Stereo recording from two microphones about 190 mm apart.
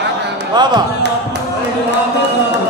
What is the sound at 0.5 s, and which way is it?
Speech, 20° right (ahead or behind).